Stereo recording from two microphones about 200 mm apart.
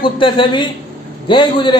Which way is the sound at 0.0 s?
25° left (ahead or behind).